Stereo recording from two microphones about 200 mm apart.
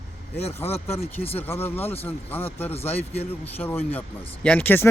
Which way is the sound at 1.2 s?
30° left (ahead or behind).